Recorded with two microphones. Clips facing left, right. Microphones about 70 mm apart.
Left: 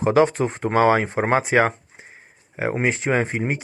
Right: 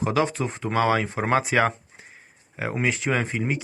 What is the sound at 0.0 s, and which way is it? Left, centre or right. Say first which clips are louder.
Speech: left 6 dB; left.